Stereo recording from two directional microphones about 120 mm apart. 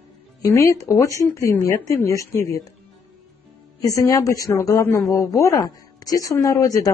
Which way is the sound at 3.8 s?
30° left (ahead or behind).